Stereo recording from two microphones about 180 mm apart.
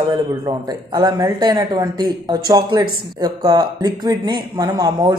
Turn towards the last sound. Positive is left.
turn(degrees=-20)  # may be behind; listen again after turning